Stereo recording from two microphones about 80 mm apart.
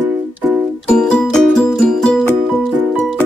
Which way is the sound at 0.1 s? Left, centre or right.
Centre.